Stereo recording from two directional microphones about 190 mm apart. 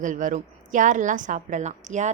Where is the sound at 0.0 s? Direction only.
40° right (ahead or behind).